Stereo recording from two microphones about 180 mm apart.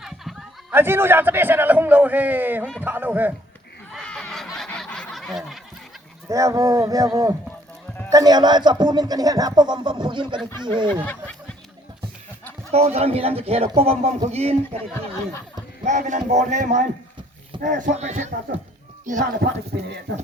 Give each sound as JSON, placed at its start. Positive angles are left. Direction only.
{"t": 0.0, "sound": "snicker", "side_deg": 0}
{"t": 0.7, "sound": "a man's voice", "side_deg": -10}
{"t": 3.9, "sound": "snicker", "side_deg": 5}
{"t": 6.2, "sound": "speech", "side_deg": -15}
{"t": 11.0, "sound": "a sound", "side_deg": 10}
{"t": 12.7, "sound": "speech", "side_deg": -35}
{"t": 15.8, "sound": "speech", "side_deg": -40}